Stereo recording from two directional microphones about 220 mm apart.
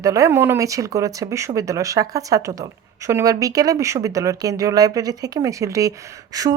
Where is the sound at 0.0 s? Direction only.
15° right (ahead or behind).